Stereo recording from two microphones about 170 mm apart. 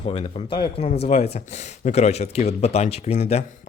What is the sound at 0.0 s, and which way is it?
Speech, 35° left (ahead or behind).